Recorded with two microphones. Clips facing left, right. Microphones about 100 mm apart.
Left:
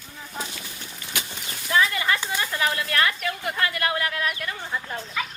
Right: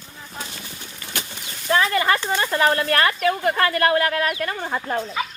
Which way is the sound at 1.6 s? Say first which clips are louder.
Right 4 dB; 50° right (ahead or behind).